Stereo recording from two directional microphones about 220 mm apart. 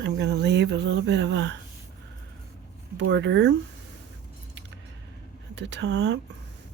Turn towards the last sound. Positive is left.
turn(degrees=-55)  # may be behind; listen again after turning